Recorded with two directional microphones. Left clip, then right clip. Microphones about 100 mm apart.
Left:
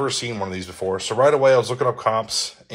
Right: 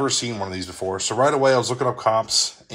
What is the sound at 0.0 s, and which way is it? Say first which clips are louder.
Speech: even; 40° right (ahead or behind).